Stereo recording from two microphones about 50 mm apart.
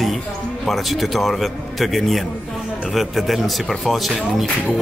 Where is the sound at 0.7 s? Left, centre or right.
Centre.